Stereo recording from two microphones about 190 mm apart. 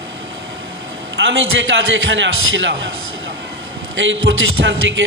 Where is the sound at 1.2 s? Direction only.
75° right (ahead or behind).